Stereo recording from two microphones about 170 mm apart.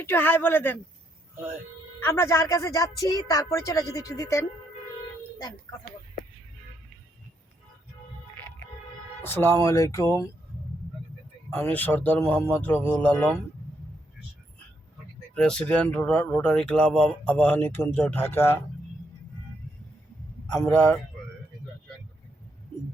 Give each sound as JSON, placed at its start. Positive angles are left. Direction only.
{"t": 0.0, "sound": "speech", "side_deg": 10}
{"t": 2.0, "sound": "a woman's voice", "side_deg": 15}
{"t": 9.2, "sound": "speech", "side_deg": 15}
{"t": 11.5, "sound": "speech", "side_deg": 10}
{"t": 15.4, "sound": "speech", "side_deg": 5}
{"t": 20.5, "sound": "speech", "side_deg": 5}